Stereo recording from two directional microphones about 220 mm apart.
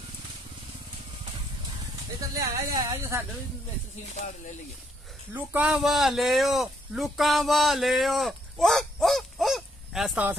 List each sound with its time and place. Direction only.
2.1 s speech: 15° right (ahead or behind)
5.3 s a man's voice: 5° right (ahead or behind)